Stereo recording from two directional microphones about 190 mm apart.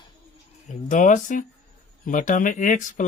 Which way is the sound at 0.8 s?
40° left (ahead or behind).